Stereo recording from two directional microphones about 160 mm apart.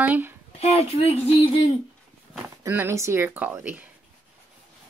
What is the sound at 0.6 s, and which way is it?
Speech, 40° left (ahead or behind).